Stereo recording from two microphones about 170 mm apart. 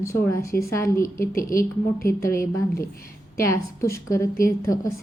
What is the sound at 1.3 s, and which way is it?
Speech, 55° left (ahead or behind).